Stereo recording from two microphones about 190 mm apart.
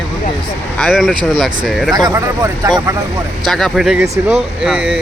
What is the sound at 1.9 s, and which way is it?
Speech, 20° right (ahead or behind).